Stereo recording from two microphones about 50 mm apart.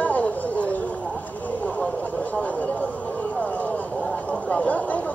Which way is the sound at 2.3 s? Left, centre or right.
Left.